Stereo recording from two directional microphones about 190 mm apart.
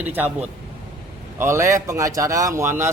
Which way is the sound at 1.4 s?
15° right (ahead or behind).